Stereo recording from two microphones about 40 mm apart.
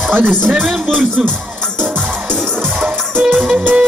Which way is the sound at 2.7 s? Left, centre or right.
Centre.